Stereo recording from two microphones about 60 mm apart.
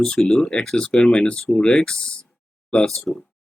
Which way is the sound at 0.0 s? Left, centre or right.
Centre.